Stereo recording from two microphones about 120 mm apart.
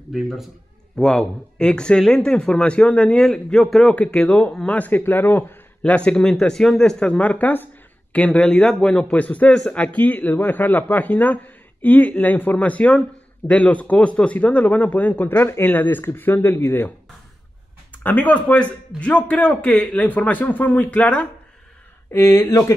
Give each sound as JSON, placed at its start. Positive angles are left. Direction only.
{"t": 0.1, "sound": "a man's voice", "side_deg": 0}
{"t": 18.0, "sound": "speech", "side_deg": 15}
{"t": 22.1, "sound": "speech", "side_deg": 20}